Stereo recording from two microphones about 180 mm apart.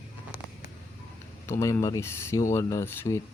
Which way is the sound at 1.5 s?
15° left (ahead or behind).